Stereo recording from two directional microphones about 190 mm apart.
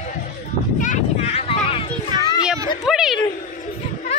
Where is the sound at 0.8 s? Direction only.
40° left (ahead or behind).